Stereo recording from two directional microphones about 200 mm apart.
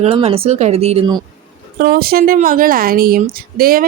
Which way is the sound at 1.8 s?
50° right (ahead or behind).